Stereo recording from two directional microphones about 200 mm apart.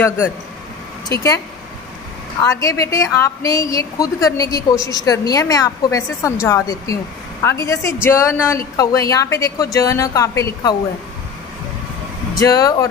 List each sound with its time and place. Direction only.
2.4 s a woman's voice: 15° left (ahead or behind)
12.4 s a woman's voice: 15° left (ahead or behind)